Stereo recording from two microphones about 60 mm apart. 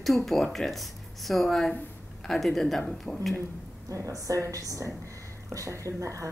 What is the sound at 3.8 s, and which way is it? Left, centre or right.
A woman's voice, right.